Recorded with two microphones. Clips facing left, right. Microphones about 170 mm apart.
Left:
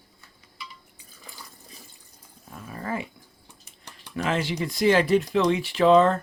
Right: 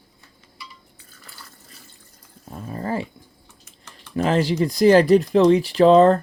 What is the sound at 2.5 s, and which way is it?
Dog, 30° right (ahead or behind).